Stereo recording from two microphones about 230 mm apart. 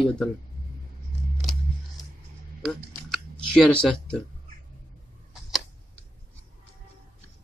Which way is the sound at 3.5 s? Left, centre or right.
Centre.